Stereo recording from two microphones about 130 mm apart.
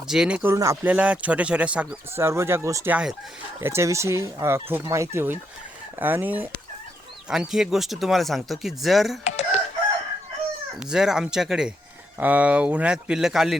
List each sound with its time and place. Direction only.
0.1 s speech: 5° right (ahead or behind)
0.4 s speech: 25° right (ahead or behind)
0.9 s speech: 10° right (ahead or behind)
2.9 s speech: 5° right (ahead or behind)
3.6 s speech: 20° right (ahead or behind); by 9.1 s centre (ahead or behind)
9.2 s chicken: 60° left (ahead or behind)
10.8 s speech: 5° right (ahead or behind)